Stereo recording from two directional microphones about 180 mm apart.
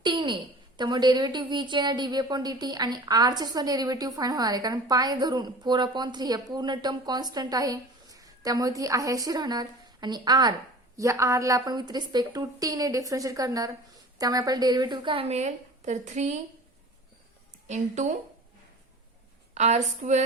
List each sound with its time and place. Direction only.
0.0 s a sound: 25° right (ahead or behind)
0.8 s a woman's voice: 25° right (ahead or behind); by 16.4 s 40° right (ahead or behind)
17.7 s a woman's voice: 40° right (ahead or behind)
19.5 s a woman's voice: 40° right (ahead or behind)